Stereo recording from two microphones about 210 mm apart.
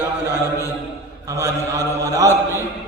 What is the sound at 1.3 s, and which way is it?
A man's voice, 15° right (ahead or behind).